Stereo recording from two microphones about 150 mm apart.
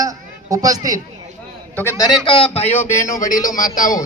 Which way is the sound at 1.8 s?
20° left (ahead or behind).